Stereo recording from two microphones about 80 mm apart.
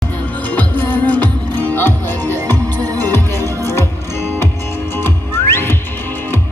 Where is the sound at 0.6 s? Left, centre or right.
Left.